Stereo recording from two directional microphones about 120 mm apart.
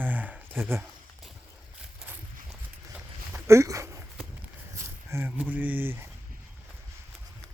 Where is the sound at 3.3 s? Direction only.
25° right (ahead or behind).